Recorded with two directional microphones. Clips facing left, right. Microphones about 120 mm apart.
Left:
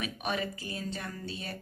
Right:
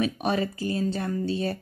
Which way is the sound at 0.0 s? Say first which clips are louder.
Right 8 dB; 35° right (ahead or behind).